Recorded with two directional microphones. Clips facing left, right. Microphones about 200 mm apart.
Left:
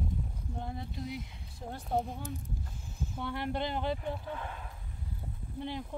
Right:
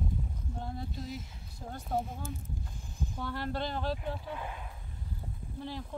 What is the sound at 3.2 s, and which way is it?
Speech, 20° left (ahead or behind).